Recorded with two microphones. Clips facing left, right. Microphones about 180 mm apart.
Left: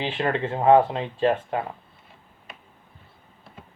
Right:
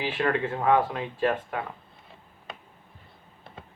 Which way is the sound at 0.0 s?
25° left (ahead or behind).